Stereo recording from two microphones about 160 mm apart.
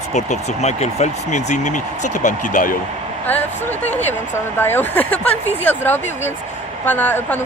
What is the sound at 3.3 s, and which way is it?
Speech, 10° left (ahead or behind).